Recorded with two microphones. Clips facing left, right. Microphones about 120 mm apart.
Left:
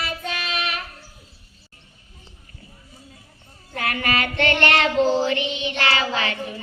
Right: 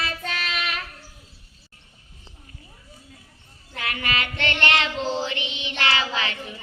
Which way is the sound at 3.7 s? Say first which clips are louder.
Left 5 dB; 40° left (ahead or behind).